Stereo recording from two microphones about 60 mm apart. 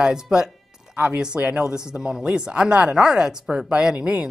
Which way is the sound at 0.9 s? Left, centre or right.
Right.